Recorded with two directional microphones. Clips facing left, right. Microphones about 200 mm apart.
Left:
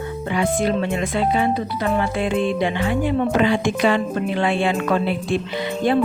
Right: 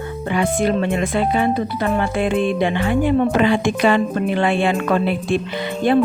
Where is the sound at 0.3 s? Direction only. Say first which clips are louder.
Right 2 dB; 55° right (ahead or behind).